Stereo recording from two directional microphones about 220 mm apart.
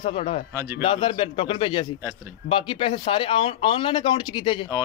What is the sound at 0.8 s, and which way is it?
A man's voice, 25° left (ahead or behind).